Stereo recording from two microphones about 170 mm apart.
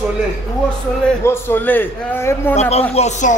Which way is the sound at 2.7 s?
35° left (ahead or behind).